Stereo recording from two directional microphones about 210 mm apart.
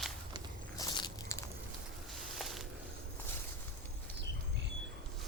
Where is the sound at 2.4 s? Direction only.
Centre (ahead or behind).